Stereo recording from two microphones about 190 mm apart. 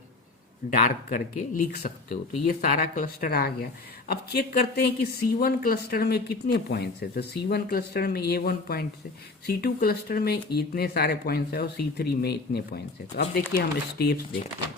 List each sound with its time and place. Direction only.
0.7 s speech: 45° left (ahead or behind)